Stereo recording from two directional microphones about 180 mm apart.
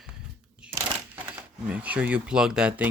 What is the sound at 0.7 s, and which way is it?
Speech, 10° right (ahead or behind).